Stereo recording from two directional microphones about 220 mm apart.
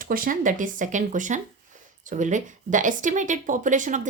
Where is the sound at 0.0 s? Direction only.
40° right (ahead or behind).